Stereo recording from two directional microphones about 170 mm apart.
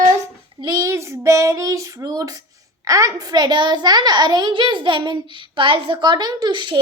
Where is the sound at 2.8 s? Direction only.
20° right (ahead or behind).